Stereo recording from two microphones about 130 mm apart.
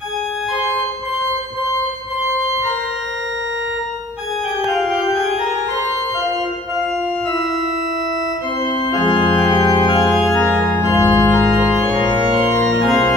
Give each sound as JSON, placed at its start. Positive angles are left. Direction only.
{"t": 8.9, "sound": "organ", "side_deg": 35}
{"t": 10.9, "sound": "organ", "side_deg": 25}
{"t": 12.6, "sound": "organ", "side_deg": 0}